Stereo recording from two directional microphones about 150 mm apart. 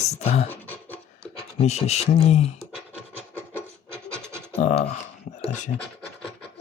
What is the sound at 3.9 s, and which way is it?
Scratch, 20° right (ahead or behind).